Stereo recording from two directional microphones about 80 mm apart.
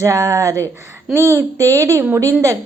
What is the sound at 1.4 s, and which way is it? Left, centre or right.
Speech, right.